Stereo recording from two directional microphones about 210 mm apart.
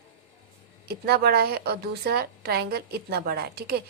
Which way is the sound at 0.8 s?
50° right (ahead or behind).